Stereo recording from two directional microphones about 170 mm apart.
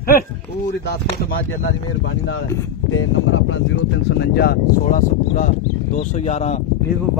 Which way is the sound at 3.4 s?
90° left.